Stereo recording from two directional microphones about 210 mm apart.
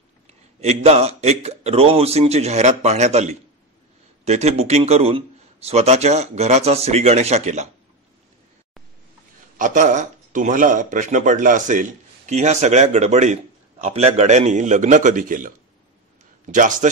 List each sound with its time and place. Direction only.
0.3 s speech: 30° right (ahead or behind)
9.6 s speech: 35° right (ahead or behind)